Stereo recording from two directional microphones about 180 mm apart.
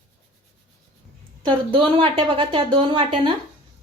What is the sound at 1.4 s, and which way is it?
A woman's voice, 30° right (ahead or behind).